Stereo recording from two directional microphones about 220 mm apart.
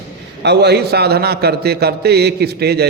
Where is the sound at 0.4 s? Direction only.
50° right (ahead or behind).